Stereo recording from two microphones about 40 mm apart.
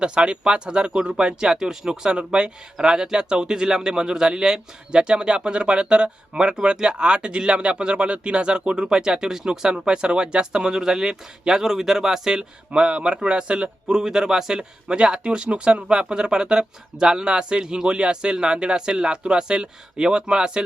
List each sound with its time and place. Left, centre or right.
0.0 s speech: right
14.9 s speech: right